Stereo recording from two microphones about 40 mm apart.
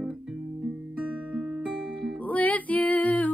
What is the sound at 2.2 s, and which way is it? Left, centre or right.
Music, left.